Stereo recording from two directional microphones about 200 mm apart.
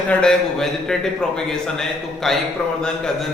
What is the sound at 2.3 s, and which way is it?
Speech, centre (ahead or behind).